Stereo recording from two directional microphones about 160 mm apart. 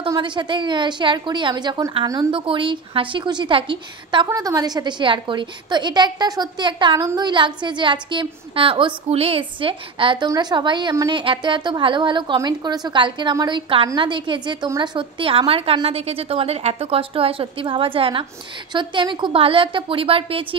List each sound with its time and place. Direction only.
0.1 s a woman's voice: 30° right (ahead or behind)